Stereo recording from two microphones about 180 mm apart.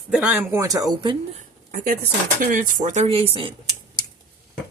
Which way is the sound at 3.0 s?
30° right (ahead or behind).